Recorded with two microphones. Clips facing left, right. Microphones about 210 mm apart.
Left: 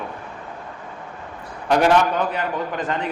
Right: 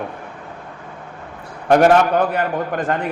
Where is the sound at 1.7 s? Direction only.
50° right (ahead or behind).